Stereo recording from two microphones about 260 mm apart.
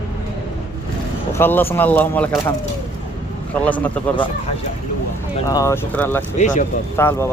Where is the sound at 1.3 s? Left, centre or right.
Centre.